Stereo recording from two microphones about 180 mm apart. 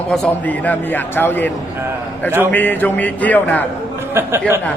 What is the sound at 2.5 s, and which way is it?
A man's voice, 10° left (ahead or behind).